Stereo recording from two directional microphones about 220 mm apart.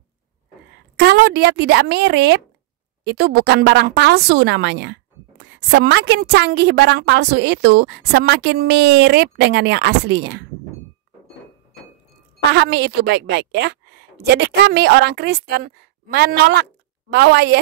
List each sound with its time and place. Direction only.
0.9 s a woman's voice: 50° right (ahead or behind)
12.5 s a woman's voice: 50° right (ahead or behind)